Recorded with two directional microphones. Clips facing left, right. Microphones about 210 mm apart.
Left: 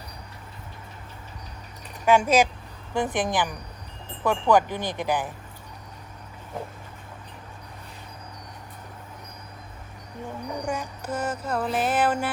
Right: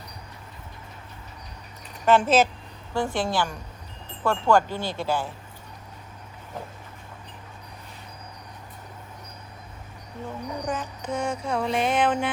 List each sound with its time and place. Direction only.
2.0 s speech: 10° left (ahead or behind)
10.2 s speech: 10° left (ahead or behind)